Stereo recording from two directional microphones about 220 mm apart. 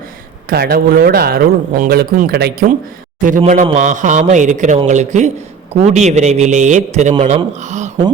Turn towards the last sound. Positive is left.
turn(degrees=-30)  # may be behind; listen again after turning